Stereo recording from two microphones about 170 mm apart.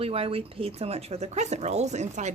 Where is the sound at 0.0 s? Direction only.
35° right (ahead or behind).